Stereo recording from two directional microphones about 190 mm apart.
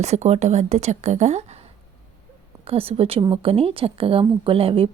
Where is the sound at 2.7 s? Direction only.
30° right (ahead or behind).